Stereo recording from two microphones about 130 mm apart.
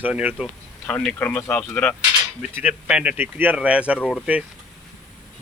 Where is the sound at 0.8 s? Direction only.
10° left (ahead or behind).